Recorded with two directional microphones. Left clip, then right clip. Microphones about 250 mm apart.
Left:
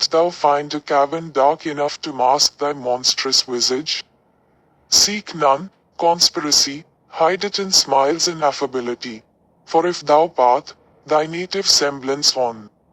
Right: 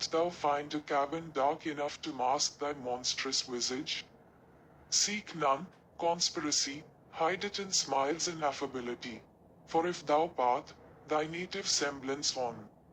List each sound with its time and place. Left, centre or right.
0.0 s speech: left